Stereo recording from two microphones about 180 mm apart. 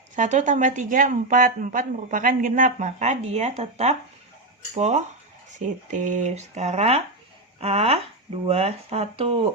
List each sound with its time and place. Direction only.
0.2 s speech: 40° right (ahead or behind)